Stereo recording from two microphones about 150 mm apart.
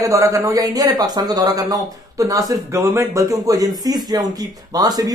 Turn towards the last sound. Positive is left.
turn(degrees=-25)  # may be behind; listen again after turning